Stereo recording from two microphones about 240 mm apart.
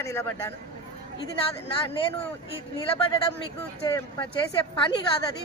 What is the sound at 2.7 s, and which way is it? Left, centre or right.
Speech, centre.